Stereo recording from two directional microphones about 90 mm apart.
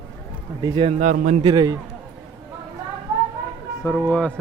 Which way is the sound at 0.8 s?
65° right (ahead or behind).